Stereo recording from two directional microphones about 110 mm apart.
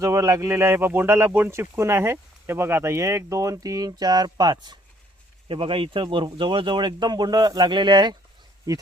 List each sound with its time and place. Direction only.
0.0 s speech: 30° right (ahead or behind)
8.7 s speech: 30° right (ahead or behind)